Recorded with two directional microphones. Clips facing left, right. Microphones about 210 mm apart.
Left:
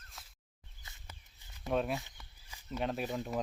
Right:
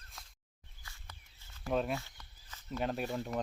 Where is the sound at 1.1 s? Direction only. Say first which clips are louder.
Left 1 dB; 15° left (ahead or behind).